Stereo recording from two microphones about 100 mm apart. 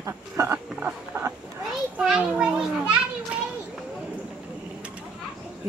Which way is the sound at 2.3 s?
10° right (ahead or behind).